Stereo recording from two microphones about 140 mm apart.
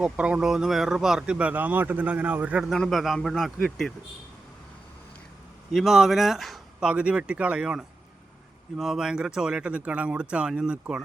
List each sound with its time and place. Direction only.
0.0 s speech: 10° right (ahead or behind)
5.7 s speech: centre (ahead or behind)